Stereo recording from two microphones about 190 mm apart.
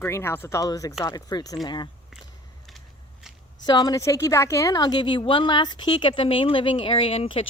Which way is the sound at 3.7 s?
20° left (ahead or behind).